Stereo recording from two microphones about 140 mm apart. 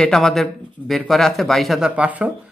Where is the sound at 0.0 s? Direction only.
5° left (ahead or behind).